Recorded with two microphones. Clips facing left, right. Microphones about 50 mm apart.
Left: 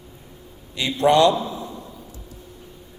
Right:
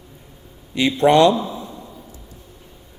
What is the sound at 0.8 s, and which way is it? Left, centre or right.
Speech, right.